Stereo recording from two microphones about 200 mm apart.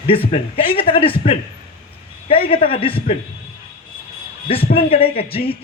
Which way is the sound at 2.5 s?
30° left (ahead or behind).